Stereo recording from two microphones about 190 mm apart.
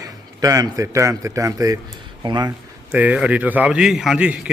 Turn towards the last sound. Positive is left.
turn(degrees=-5)  # may be behind; listen again after turning